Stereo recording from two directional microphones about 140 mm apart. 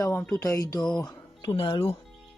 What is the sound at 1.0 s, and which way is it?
Speech, 35° left (ahead or behind).